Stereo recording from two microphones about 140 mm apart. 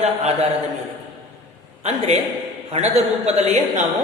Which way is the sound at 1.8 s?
45° right (ahead or behind).